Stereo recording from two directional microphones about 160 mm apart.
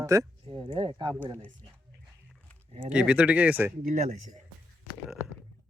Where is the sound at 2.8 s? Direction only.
5° right (ahead or behind).